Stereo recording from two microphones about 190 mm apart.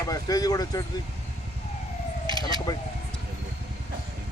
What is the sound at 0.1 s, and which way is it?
Speech, 20° left (ahead or behind).